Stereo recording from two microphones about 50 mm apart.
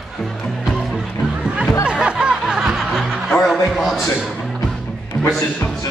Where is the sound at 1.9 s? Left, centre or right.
Right.